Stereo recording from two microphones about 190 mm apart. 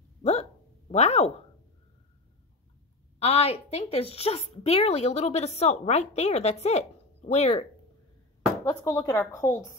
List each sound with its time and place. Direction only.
0.2 s hiccup: 35° left (ahead or behind)
3.2 s a woman's voice: 30° left (ahead or behind)
8.6 s speech: 20° left (ahead or behind)